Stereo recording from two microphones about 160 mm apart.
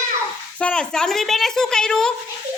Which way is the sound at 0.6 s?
5° left (ahead or behind).